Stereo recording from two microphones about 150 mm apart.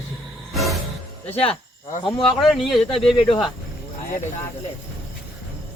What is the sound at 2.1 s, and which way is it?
Speech, centre (ahead or behind).